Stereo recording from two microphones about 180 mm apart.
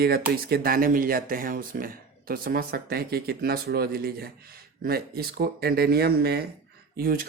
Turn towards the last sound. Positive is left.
turn(degrees=-55)  # may be behind; listen again after turning